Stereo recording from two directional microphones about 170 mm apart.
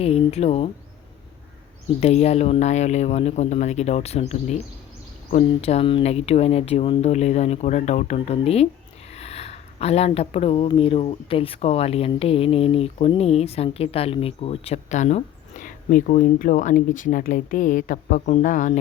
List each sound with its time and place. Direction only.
0.0 s speech: 35° left (ahead or behind)
2.0 s speech: 40° left (ahead or behind)